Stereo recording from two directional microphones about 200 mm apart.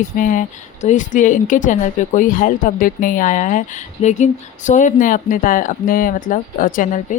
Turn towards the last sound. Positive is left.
turn(degrees=40)  # may be behind; listen again after turning